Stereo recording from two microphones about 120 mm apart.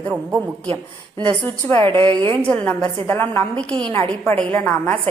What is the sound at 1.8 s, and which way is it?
Speech, 45° right (ahead or behind).